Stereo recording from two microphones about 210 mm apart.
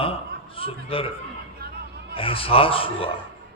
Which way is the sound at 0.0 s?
25° left (ahead or behind).